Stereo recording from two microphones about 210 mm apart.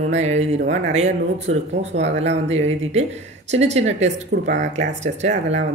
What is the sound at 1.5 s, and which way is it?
Speech, 30° right (ahead or behind).